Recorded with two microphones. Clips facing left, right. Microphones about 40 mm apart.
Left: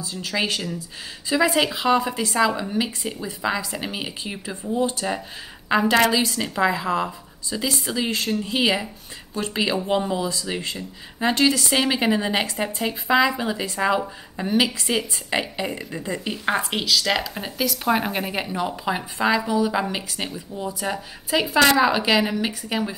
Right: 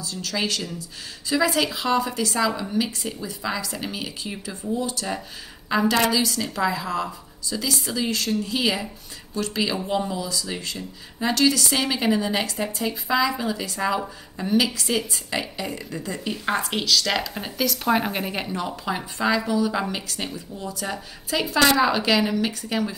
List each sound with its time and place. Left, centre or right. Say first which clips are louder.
0.0 s speech: left 2 dB; centre
16.5 s speech: right 1 dB; centre